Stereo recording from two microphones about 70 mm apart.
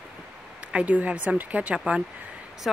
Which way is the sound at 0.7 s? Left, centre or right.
Right.